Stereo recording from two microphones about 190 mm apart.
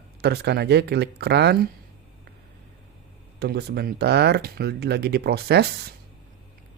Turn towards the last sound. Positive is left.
turn(degrees=-60)  # may be behind; listen again after turning